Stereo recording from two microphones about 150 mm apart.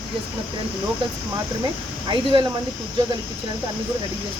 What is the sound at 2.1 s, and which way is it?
Speech, 35° right (ahead or behind).